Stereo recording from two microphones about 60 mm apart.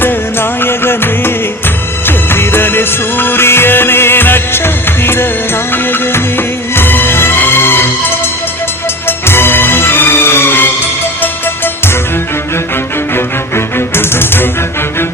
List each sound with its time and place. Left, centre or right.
0.0 s music: left
13.7 s music: left